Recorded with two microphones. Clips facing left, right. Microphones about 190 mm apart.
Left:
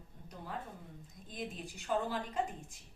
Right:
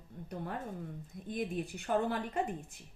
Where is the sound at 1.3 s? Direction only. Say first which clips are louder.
Right 7 dB; 60° right (ahead or behind).